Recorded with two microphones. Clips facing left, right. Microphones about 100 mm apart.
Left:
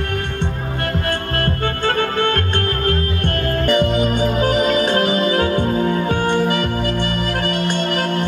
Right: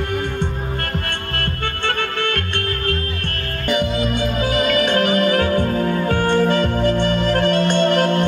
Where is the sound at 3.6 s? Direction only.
50° left (ahead or behind).